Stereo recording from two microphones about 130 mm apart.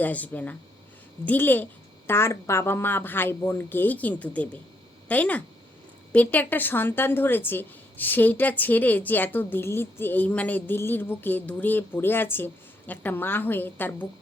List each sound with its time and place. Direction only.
0.0 s a woman's voice: 10° left (ahead or behind)